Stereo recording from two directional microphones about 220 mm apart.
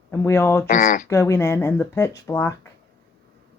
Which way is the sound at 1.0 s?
10° left (ahead or behind).